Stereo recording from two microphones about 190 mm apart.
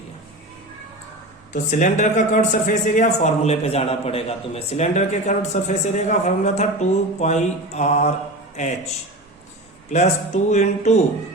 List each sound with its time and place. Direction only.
1.5 s speech: 40° left (ahead or behind)
9.9 s speech: 40° left (ahead or behind)